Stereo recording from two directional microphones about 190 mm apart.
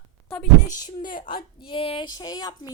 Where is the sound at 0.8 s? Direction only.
20° left (ahead or behind).